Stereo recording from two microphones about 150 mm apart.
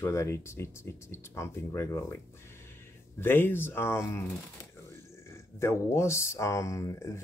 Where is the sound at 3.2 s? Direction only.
15° left (ahead or behind).